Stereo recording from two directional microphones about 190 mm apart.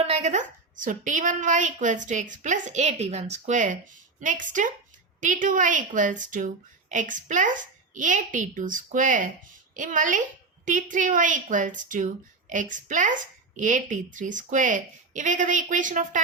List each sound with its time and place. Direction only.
0.0 s a woman's voice: 35° right (ahead or behind)